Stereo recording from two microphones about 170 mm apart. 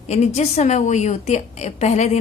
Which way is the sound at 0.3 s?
40° left (ahead or behind).